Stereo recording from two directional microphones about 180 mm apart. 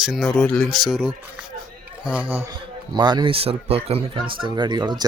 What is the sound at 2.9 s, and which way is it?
Speech, 25° right (ahead or behind).